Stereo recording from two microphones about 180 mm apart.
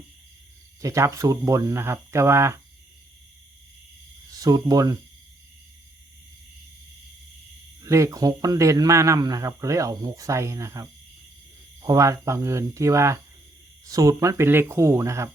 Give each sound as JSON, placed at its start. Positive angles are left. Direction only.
{"t": 0.8, "sound": "speech", "side_deg": -15}
{"t": 4.3, "sound": "speech", "side_deg": -20}
{"t": 7.8, "sound": "speech", "side_deg": -15}